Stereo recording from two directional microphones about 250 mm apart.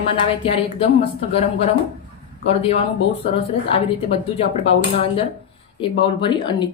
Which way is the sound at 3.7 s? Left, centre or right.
Left.